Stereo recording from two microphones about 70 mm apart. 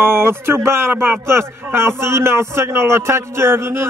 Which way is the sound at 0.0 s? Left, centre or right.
Right.